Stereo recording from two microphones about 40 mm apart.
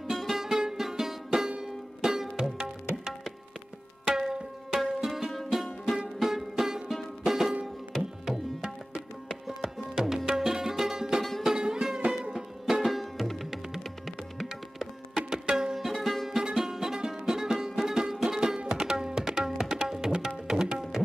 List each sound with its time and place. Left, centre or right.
0.3 s music: centre
4.1 s tabla: centre
5.5 s music: centre
8.3 s tabla: centre
11.4 s music: centre
18.7 s tabla: centre